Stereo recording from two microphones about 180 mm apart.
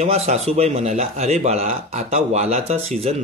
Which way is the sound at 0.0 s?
35° right (ahead or behind).